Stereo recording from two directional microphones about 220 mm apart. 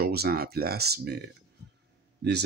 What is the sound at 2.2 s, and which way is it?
Speech, 50° right (ahead or behind).